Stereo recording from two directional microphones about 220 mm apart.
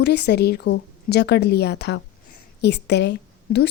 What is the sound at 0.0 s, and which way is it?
A woman's voice, 50° left (ahead or behind).